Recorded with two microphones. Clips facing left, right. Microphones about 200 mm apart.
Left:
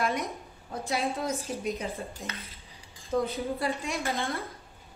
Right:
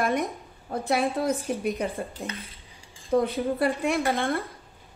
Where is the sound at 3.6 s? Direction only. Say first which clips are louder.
Right 10 dB; 55° right (ahead or behind).